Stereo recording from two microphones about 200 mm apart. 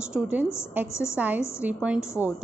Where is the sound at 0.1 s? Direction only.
5° right (ahead or behind).